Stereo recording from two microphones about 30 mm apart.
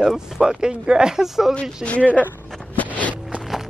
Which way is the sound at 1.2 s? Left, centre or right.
Centre.